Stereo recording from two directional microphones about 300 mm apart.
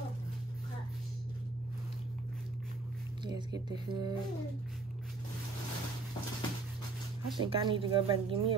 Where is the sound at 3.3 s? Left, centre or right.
Centre.